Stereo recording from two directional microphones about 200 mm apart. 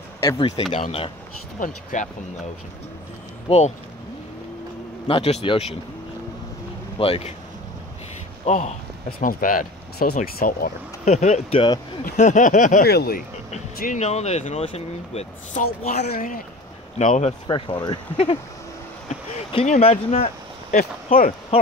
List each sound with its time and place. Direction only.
0.2 s speech: 15° left (ahead or behind)
0.7 s speech: 30° left (ahead or behind)
3.4 s speech: 30° left (ahead or behind)
5.0 s speech: 30° left (ahead or behind)
7.0 s speech: 30° left (ahead or behind)
8.5 s speech: 35° left (ahead or behind)
12.0 s speech: 40° left (ahead or behind)
13.7 s speech: 40° left (ahead or behind)
17.5 s speech: 20° left (ahead or behind)
20.7 s speech: 45° left (ahead or behind)